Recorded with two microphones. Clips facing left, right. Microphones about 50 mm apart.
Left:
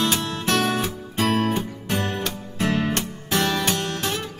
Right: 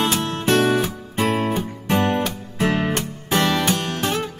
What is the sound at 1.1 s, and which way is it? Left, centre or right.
Music, right.